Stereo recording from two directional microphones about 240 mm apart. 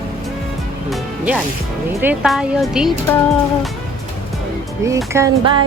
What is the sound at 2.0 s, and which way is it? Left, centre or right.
Speech, centre.